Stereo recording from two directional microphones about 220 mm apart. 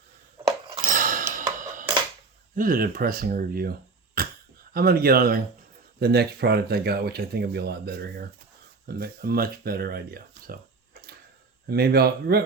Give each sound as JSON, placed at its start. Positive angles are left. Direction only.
{"t": 0.9, "sound": "dishes", "side_deg": -35}
{"t": 2.6, "sound": "speech", "side_deg": -40}
{"t": 4.2, "sound": "a sound", "side_deg": -40}
{"t": 4.7, "sound": "speech", "side_deg": -45}
{"t": 11.7, "sound": "speech", "side_deg": -45}